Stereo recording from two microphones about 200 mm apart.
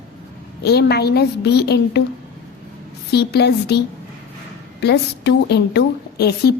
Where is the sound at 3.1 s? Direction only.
55° left (ahead or behind).